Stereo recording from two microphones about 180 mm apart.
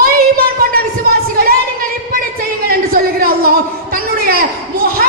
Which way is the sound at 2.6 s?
55° right (ahead or behind).